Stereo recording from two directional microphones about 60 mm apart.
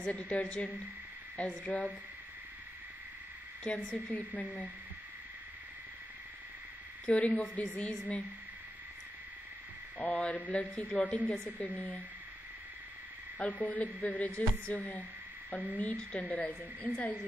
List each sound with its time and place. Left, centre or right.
0.0 s a woman's voice: left
3.6 s a woman's voice: centre
7.1 s a woman's voice: left
9.9 s a woman's voice: left
13.4 s a woman's voice: left